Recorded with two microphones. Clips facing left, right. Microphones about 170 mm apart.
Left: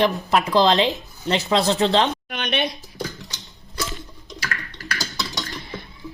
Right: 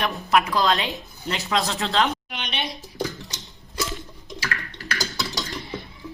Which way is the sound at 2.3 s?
55° left (ahead or behind).